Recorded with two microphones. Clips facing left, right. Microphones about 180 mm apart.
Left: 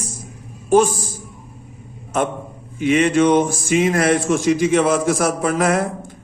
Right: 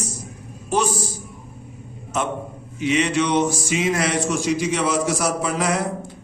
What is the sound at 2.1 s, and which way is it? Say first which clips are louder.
A man's voice: left 4 dB; 55° left (ahead or behind).